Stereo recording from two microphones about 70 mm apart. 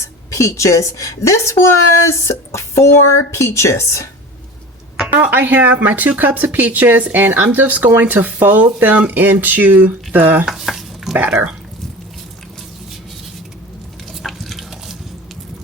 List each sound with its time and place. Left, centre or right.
0.3 s speech: left
5.2 s speech: right
10.4 s stir: centre
11.2 s speech: right
14.1 s pig: centre